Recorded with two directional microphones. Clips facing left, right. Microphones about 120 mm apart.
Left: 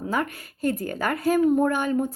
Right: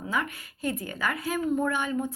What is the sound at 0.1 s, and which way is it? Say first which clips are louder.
Speech: left 3 dB; 45° left (ahead or behind).